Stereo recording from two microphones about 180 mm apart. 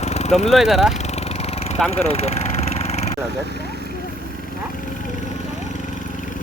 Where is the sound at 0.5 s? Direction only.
Centre (ahead or behind).